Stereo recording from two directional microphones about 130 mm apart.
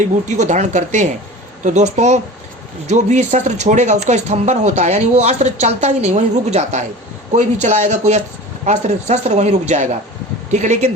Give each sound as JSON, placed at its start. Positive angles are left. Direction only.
{"t": 0.0, "sound": "speech", "side_deg": -70}